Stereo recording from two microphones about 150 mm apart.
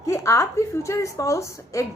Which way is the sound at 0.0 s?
20° left (ahead or behind).